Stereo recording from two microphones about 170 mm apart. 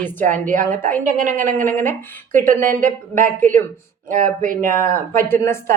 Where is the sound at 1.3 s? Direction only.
10° left (ahead or behind).